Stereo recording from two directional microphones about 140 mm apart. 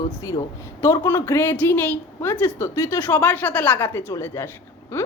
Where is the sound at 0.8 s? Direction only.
20° left (ahead or behind).